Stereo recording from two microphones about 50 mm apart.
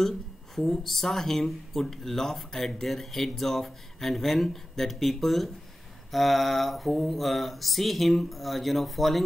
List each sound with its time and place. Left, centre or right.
0.6 s speech: centre